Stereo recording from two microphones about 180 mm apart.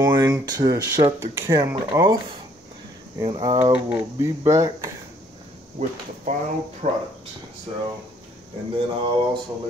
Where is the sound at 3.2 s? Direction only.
25° right (ahead or behind).